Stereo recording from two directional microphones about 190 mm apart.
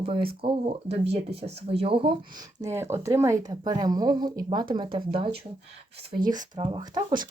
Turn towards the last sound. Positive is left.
turn(degrees=-20)  # may be behind; listen again after turning